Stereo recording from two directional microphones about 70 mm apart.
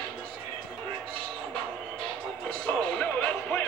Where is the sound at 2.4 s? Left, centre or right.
Centre.